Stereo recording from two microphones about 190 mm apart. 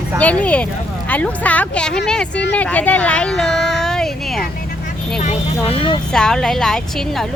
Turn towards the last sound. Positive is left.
turn(degrees=5)  # may be behind; listen again after turning